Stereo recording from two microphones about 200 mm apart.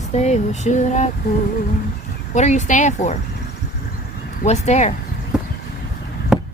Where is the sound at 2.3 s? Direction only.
35° left (ahead or behind).